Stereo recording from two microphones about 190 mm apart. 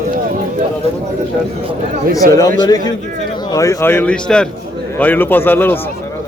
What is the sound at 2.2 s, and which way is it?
Speech, 50° right (ahead or behind).